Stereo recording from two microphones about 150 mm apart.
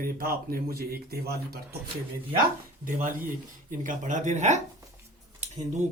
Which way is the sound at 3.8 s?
55° right (ahead or behind).